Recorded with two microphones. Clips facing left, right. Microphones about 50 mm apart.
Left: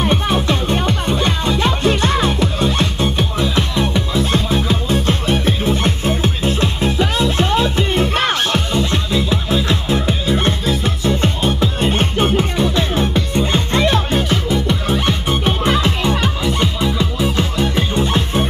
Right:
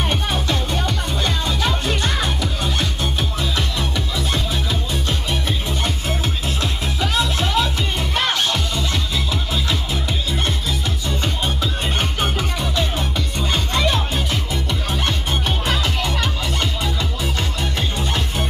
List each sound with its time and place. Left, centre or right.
0.1 s music: left
14.7 s music: left